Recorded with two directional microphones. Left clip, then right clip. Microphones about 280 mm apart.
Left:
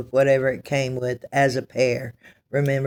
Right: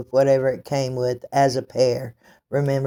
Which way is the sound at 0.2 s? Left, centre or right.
Centre.